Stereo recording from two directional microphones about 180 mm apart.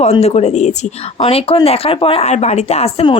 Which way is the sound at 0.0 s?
35° left (ahead or behind).